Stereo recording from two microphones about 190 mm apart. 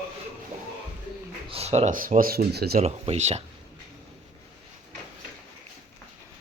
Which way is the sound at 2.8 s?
35° right (ahead or behind).